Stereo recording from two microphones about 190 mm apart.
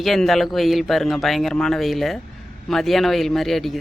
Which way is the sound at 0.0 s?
Centre (ahead or behind).